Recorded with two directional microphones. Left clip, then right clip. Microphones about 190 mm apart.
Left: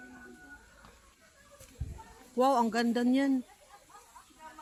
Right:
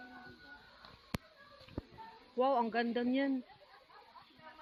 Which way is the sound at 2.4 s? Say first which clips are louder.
Left 5 dB; 40° left (ahead or behind).